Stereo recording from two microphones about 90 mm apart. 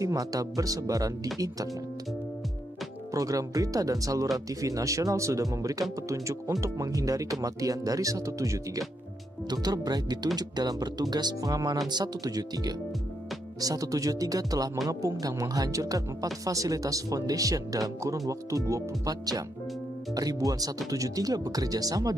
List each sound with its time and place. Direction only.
0.0 s speech: 40° right (ahead or behind)
3.1 s speech: 40° right (ahead or behind)
9.5 s speech: 50° right (ahead or behind)